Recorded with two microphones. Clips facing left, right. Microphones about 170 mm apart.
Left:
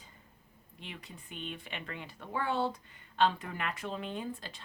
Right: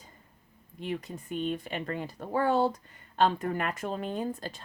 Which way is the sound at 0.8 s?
45° right (ahead or behind).